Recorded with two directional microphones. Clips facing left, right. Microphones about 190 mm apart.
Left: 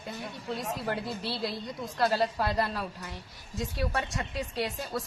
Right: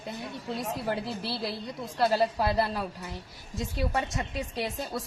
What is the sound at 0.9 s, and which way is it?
A woman's voice, 10° right (ahead or behind).